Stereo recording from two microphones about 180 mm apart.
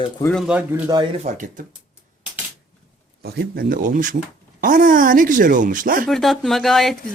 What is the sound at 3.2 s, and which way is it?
Speech, 60° right (ahead or behind).